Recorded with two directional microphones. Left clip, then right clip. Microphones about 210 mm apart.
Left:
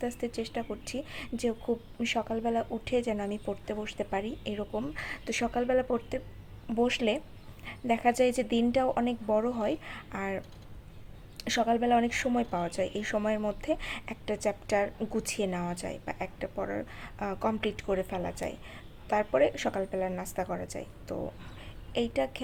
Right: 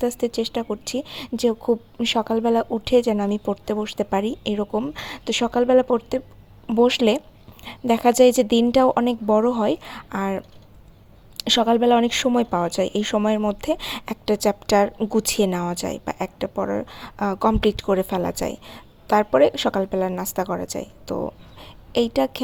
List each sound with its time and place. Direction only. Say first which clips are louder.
0.0 s speech: right 11 dB; 35° right (ahead or behind)